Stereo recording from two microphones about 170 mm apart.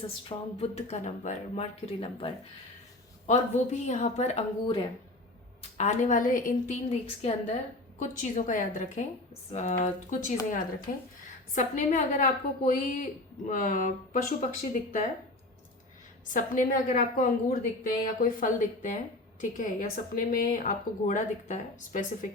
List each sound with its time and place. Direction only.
0.3 s a woman's voice: 35° left (ahead or behind)
5.7 s a woman's voice: 45° left (ahead or behind)
7.9 s a woman's voice: 50° left (ahead or behind)
10.9 s speech: 60° left (ahead or behind)
11.5 s a woman's voice: 45° left (ahead or behind)
16.3 s a woman's voice: 50° left (ahead or behind)